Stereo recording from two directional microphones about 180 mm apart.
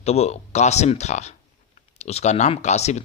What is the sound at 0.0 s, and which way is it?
Speech, 35° left (ahead or behind).